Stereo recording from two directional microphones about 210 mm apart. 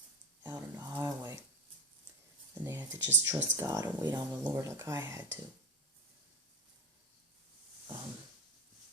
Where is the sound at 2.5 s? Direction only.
10° right (ahead or behind).